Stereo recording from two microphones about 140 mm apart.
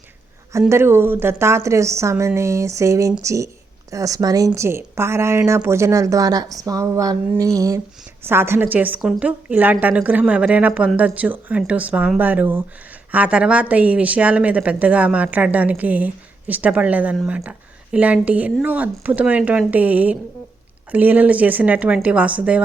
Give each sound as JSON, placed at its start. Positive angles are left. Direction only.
{"t": 0.7, "sound": "speech", "side_deg": -15}